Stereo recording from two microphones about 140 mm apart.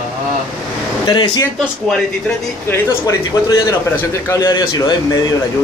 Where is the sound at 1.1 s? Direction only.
30° left (ahead or behind).